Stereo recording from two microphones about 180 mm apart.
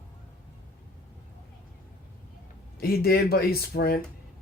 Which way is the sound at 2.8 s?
60° left (ahead or behind).